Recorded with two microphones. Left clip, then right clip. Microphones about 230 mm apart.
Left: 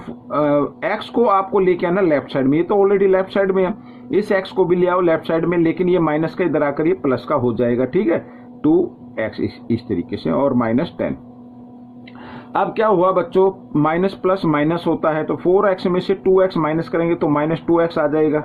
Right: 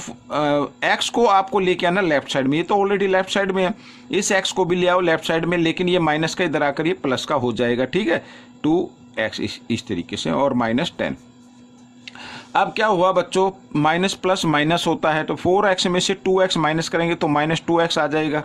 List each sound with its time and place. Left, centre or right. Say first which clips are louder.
0.3 s speech: left 3 dB; right
12.5 s speech: left 2 dB; right